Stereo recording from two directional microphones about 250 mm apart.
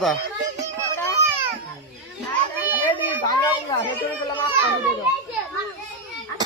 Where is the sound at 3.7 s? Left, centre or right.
Centre.